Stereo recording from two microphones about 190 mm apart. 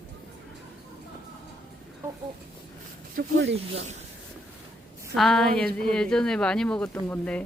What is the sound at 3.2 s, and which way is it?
Speech, 70° right (ahead or behind).